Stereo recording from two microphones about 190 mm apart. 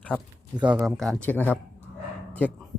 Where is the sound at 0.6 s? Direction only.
10° right (ahead or behind); by 1.5 s 10° left (ahead or behind).